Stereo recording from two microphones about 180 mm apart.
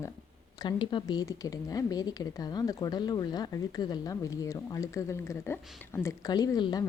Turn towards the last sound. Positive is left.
turn(degrees=25)  # may be behind; listen again after turning